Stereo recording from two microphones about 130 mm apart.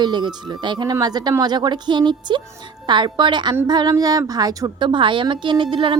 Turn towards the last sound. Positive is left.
turn(degrees=-40)  # may be behind; listen again after turning